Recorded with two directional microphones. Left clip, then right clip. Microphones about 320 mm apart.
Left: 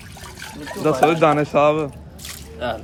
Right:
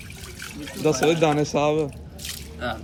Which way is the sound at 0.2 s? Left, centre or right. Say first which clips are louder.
Left 4 dB; centre.